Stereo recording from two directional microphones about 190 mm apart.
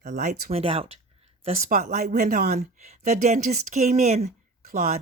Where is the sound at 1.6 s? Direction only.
45° right (ahead or behind).